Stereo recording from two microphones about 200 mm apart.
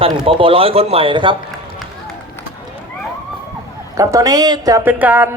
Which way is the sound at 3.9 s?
15° right (ahead or behind).